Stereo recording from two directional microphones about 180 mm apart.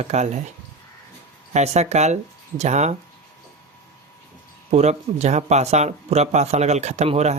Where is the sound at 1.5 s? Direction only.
40° right (ahead or behind).